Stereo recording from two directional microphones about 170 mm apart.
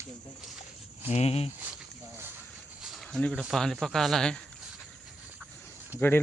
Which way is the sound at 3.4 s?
Centre (ahead or behind).